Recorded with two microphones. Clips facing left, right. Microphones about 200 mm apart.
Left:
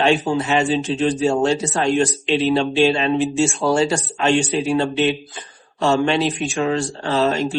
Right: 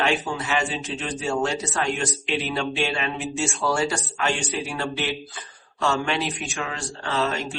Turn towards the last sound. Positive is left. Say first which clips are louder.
# left 7 dB
turn(degrees=30)  # may be behind; listen again after turning